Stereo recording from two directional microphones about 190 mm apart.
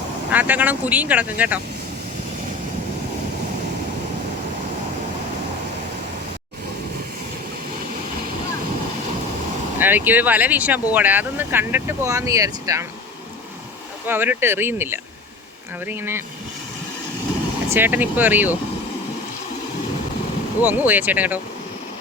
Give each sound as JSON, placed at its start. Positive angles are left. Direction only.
{"t": 0.3, "sound": "speech", "side_deg": -10}
{"t": 9.7, "sound": "speech", "side_deg": -10}
{"t": 14.1, "sound": "speech", "side_deg": -10}
{"t": 17.7, "sound": "speech", "side_deg": -10}
{"t": 20.6, "sound": "speech", "side_deg": -10}